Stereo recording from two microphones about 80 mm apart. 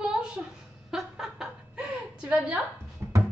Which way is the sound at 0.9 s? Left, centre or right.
Centre.